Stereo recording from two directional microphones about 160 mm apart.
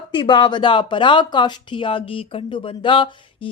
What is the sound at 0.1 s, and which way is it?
Speech, 30° left (ahead or behind).